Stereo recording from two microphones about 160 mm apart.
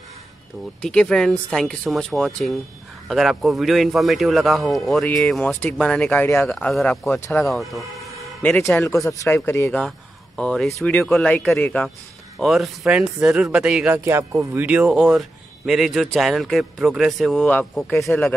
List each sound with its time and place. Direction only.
0.8 s speech: 5° left (ahead or behind)
6.5 s speech: centre (ahead or behind)
7.2 s speech: 15° left (ahead or behind)
7.4 s speech: centre (ahead or behind)
9.0 s speech: 20° left (ahead or behind)
9.7 s speech: 5° left (ahead or behind)